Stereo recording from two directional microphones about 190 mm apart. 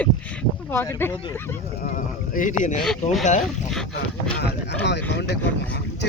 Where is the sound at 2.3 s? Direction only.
45° left (ahead or behind).